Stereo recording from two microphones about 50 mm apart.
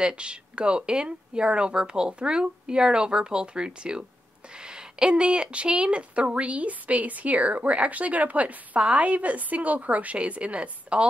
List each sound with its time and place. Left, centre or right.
0.0 s speech: centre